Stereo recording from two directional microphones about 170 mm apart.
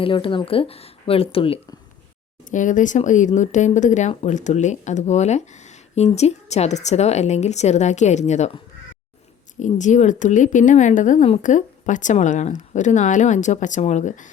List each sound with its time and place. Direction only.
0.0 s a woman's voice: 30° left (ahead or behind)
2.5 s a woman's voice: 50° left (ahead or behind)
9.6 s speech: 45° left (ahead or behind)